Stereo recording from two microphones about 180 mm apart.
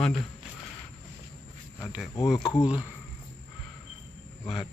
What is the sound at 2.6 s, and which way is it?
Speech, 5° right (ahead or behind).